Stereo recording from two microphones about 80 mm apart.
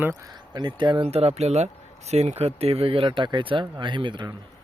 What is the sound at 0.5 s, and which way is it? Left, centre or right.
Speech, right.